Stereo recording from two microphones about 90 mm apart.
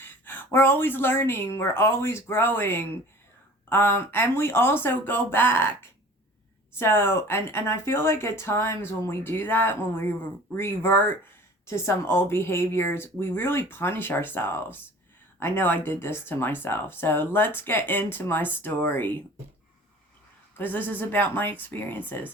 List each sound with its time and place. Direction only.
0.0 s speech: 20° left (ahead or behind)
20.6 s speech: 20° left (ahead or behind)